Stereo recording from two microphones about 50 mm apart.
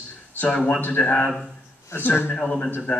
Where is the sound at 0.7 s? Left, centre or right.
Left.